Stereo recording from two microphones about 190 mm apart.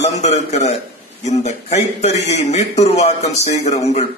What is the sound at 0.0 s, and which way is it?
A man's voice, 35° left (ahead or behind).